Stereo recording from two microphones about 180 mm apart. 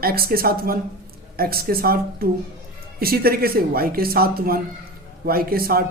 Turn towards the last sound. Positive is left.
turn(degrees=-55)  # may be behind; listen again after turning